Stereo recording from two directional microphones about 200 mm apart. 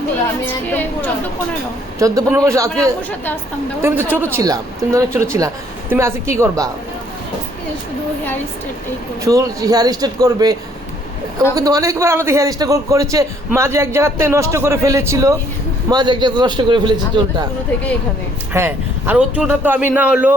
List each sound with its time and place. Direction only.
0.4 s speech: 10° left (ahead or behind)
2.0 s a man's voice: 15° right (ahead or behind)
3.8 s a man's voice: 10° right (ahead or behind)
9.2 s a man's voice: 15° right (ahead or behind)
18.5 s a man's voice: 10° right (ahead or behind)